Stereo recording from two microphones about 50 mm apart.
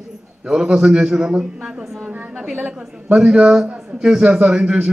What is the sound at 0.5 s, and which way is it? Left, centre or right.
A man's voice, centre.